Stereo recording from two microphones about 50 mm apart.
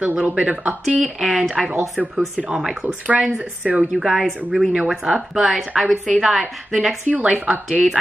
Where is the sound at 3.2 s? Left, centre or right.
Centre.